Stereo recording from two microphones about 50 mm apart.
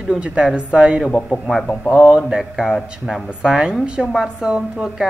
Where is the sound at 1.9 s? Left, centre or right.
Centre.